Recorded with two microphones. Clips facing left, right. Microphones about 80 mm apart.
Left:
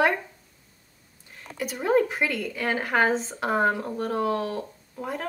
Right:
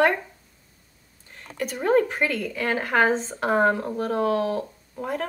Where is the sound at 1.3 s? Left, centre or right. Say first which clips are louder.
Right 2 dB; centre.